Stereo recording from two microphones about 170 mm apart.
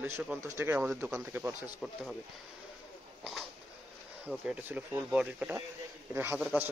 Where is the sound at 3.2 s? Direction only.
Centre (ahead or behind).